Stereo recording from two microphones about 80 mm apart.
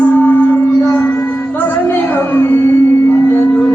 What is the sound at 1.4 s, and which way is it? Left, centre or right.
Music, left.